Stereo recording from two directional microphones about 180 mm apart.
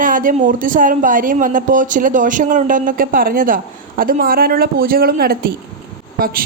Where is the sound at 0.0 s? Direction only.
50° right (ahead or behind).